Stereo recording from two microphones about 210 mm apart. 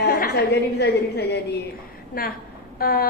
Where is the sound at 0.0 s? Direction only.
45° left (ahead or behind).